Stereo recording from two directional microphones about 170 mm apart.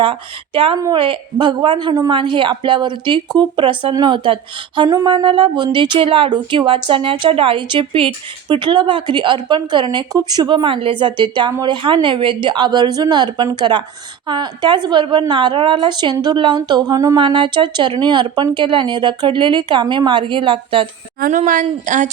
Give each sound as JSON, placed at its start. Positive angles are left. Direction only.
{"t": 0.0, "sound": "a woman's voice", "side_deg": -30}
{"t": 21.2, "sound": "speech", "side_deg": -55}